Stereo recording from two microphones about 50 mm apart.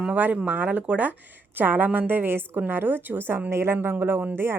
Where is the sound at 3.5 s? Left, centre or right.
Right.